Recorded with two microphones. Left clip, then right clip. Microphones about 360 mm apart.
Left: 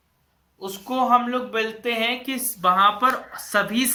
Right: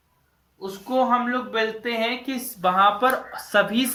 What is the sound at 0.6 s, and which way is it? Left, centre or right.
Speech, centre.